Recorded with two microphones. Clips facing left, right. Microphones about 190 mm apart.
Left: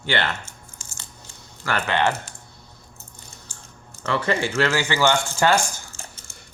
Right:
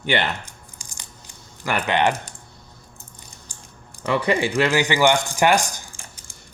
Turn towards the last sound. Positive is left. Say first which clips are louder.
# left 2 dB
turn(degrees=-15)  # may be behind; listen again after turning